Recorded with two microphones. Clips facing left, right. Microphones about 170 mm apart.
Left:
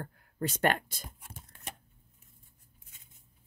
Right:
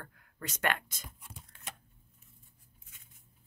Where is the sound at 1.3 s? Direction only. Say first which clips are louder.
Left 2 dB; 50° left (ahead or behind).